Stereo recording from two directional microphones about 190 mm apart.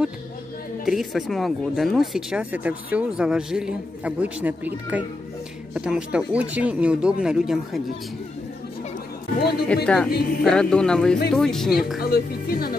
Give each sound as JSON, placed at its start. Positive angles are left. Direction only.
{"t": 0.8, "sound": "speech", "side_deg": 0}
{"t": 9.4, "sound": "speech", "side_deg": 55}
{"t": 9.8, "sound": "speech", "side_deg": 0}
{"t": 12.0, "sound": "speech", "side_deg": 50}